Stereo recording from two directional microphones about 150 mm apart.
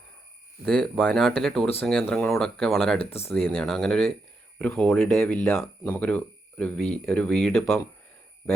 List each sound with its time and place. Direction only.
0.6 s speech: 5° left (ahead or behind)
3.0 s speech: 40° left (ahead or behind)
3.4 s speech: 5° left (ahead or behind)